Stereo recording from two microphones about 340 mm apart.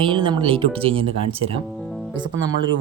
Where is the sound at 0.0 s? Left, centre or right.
Centre.